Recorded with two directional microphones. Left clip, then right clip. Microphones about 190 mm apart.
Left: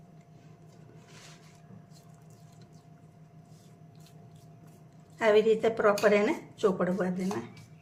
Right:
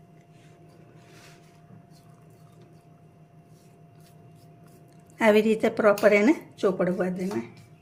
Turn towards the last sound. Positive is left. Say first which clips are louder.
# right 4 dB
turn(degrees=-30)  # may be behind; listen again after turning